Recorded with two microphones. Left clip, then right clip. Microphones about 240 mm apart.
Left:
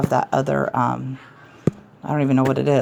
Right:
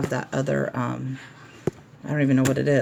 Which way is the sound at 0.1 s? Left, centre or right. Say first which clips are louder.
Left 7 dB; left.